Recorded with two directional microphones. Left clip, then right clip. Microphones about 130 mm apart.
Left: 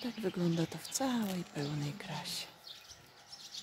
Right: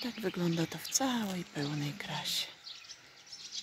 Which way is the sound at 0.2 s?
5° right (ahead or behind).